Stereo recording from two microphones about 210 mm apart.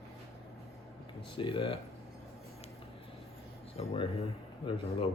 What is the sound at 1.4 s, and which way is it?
Speech, 25° left (ahead or behind).